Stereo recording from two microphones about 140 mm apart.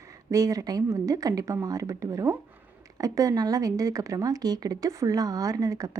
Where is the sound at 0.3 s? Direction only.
25° right (ahead or behind).